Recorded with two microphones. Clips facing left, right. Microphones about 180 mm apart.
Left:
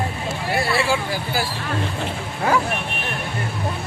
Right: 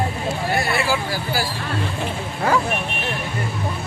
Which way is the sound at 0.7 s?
20° left (ahead or behind).